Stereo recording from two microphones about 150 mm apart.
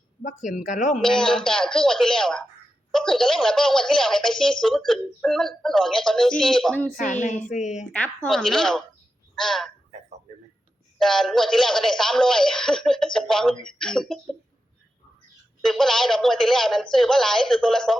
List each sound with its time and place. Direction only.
0.2 s speech: 55° left (ahead or behind)
1.0 s speech: 5° left (ahead or behind)
6.9 s a woman's voice: 55° left (ahead or behind)
8.3 s speech: centre (ahead or behind)
10.9 s speech: centre (ahead or behind)
15.6 s speech: 5° left (ahead or behind)